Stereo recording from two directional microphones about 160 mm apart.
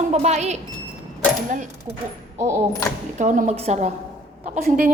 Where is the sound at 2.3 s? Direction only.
15° right (ahead or behind).